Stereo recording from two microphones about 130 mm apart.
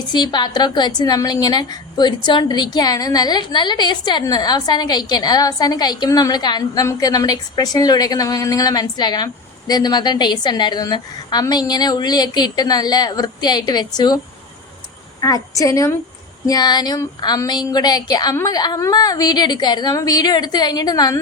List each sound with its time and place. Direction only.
0.1 s a woman's voice: 35° left (ahead or behind)
15.2 s a woman's voice: 25° left (ahead or behind)